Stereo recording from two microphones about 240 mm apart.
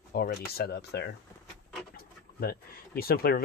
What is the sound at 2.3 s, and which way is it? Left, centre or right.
Speech, left.